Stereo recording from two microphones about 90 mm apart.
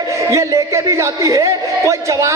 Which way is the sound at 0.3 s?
35° right (ahead or behind).